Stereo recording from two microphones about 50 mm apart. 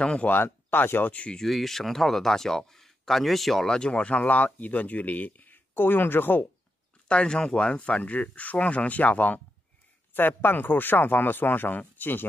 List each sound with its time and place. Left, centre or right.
0.0 s speech: left
0.3 s speech: left
1.1 s speech: left
1.4 s speech: centre
3.6 s speech: centre; by 6.4 s left
7.1 s speech: centre
10.1 s speech: left